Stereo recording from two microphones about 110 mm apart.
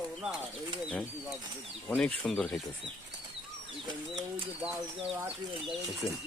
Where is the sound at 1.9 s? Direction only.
5° left (ahead or behind).